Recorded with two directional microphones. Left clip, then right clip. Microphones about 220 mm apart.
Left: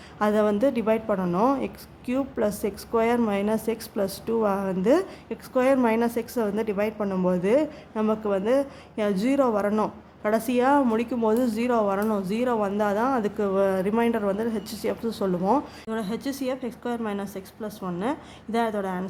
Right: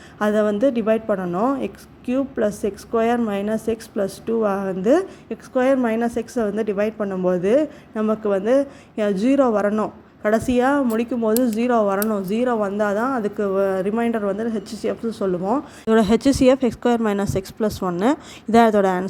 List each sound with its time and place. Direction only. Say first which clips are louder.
0.2 s a woman's voice: right 3 dB; 10° right (ahead or behind)
15.9 s speech: right 17 dB; 30° right (ahead or behind)